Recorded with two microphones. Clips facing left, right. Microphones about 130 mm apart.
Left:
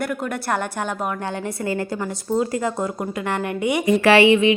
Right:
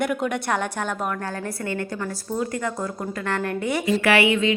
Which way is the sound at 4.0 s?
30° left (ahead or behind).